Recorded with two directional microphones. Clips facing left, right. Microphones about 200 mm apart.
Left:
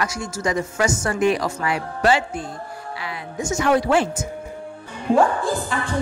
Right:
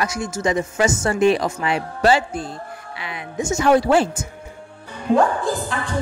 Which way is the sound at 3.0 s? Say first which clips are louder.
Right 3 dB; 25° right (ahead or behind).